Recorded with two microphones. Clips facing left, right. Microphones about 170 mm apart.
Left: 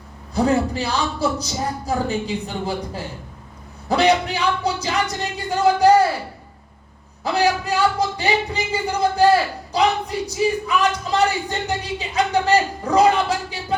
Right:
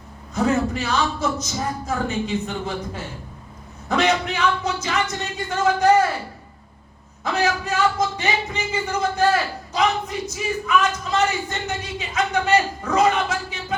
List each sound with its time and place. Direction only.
0.3 s speech: 35° left (ahead or behind)
7.3 s speech: 35° left (ahead or behind)